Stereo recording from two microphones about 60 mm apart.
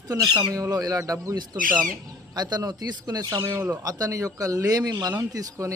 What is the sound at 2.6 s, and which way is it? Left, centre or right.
Speech, right.